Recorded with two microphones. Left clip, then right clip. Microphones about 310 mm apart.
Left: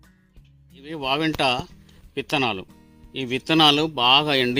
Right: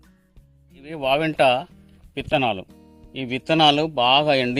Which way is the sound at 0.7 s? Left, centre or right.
Centre.